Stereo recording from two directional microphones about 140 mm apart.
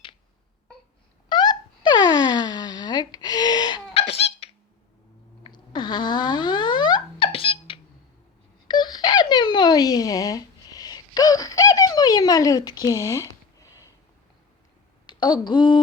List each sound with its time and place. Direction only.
1.3 s wail: 35° left (ahead or behind)
3.9 s cough: 45° left (ahead or behind)
5.4 s fart: 35° left (ahead or behind)
8.6 s wail: 30° left (ahead or behind)
15.0 s a sound: 35° left (ahead or behind)